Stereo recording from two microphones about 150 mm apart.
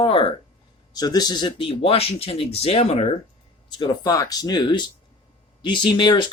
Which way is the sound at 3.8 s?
25° left (ahead or behind).